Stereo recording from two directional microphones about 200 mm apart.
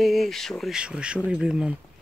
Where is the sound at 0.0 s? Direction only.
Centre (ahead or behind).